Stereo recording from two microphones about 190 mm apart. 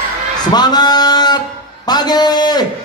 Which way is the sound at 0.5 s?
20° left (ahead or behind).